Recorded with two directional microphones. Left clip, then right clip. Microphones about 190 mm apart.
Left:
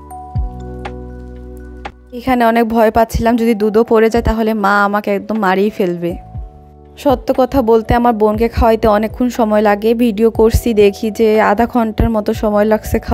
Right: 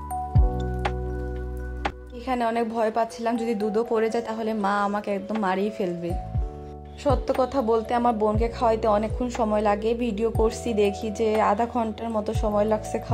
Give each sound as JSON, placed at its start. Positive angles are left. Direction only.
{"t": 2.1, "sound": "speech", "side_deg": 50}